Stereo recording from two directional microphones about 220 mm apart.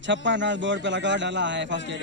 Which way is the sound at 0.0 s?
55° right (ahead or behind).